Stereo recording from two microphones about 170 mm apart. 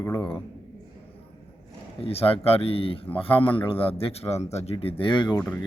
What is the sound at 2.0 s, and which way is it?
A man's voice, 35° left (ahead or behind).